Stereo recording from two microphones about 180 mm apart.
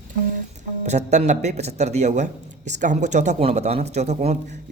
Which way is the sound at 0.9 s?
40° right (ahead or behind).